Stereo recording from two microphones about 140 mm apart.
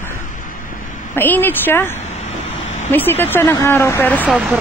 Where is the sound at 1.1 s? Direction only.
15° left (ahead or behind).